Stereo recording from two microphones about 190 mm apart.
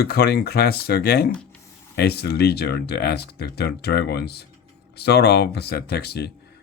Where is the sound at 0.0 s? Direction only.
55° left (ahead or behind).